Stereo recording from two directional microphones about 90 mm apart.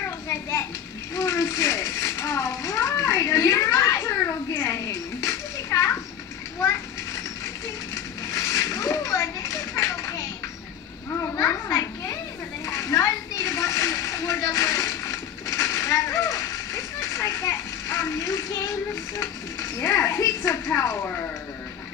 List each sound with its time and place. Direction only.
0.3 s children playing: 30° left (ahead or behind)
1.1 s mechanisms: 30° left (ahead or behind)
7.6 s a sound: 30° left (ahead or behind)
11.1 s children playing: 30° left (ahead or behind)
12.6 s splash: 30° left (ahead or behind)